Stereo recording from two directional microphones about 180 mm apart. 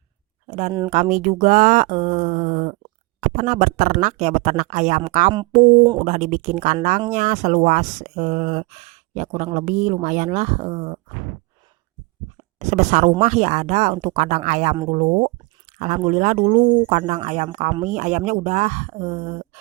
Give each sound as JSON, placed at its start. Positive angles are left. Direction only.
{"t": 0.4, "sound": "a sound", "side_deg": -35}
{"t": 0.9, "sound": "speech", "side_deg": -40}
{"t": 5.8, "sound": "speech", "side_deg": -25}
{"t": 6.1, "sound": "speech", "side_deg": -40}
{"t": 12.5, "sound": "speech", "side_deg": -40}